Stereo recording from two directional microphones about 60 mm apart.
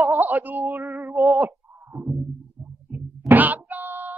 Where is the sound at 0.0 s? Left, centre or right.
Right.